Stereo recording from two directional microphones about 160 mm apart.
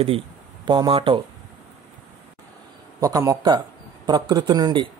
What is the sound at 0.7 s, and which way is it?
Speech, 30° right (ahead or behind).